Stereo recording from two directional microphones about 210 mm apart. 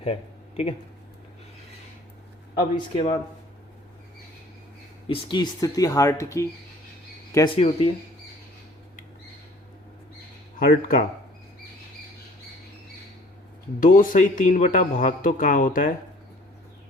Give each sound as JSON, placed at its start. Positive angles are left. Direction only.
{"t": 0.0, "sound": "a sound", "side_deg": 25}
{"t": 2.6, "sound": "speech", "side_deg": 25}
{"t": 5.0, "sound": "speech", "side_deg": 25}
{"t": 7.3, "sound": "speech", "side_deg": 25}
{"t": 13.7, "sound": "speech", "side_deg": 40}